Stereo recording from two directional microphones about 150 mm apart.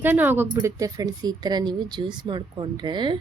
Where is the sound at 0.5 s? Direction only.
25° right (ahead or behind).